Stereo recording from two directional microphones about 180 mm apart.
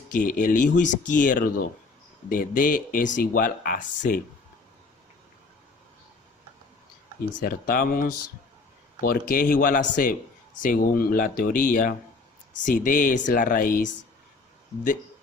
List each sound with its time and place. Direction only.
0.1 s speech: 50° left (ahead or behind)
7.3 s speech: 50° left (ahead or behind)